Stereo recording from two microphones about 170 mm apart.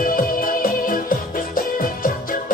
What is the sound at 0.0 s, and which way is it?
Music, 55° left (ahead or behind).